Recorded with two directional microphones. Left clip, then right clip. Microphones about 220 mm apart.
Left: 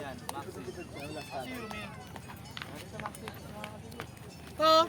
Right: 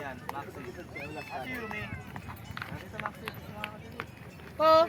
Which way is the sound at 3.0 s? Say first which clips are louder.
Right 5 dB; 15° right (ahead or behind).